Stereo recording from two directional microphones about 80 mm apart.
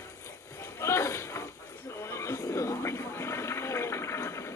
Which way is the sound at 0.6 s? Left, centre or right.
Left.